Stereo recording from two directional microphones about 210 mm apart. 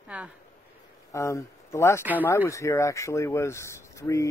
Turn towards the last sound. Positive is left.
turn(degrees=15)  # may be behind; listen again after turning